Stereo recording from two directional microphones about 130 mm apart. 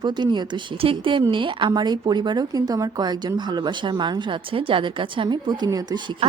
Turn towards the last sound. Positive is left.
turn(degrees=-50)  # may be behind; listen again after turning